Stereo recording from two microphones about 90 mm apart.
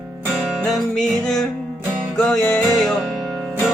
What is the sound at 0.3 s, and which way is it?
Music, centre (ahead or behind).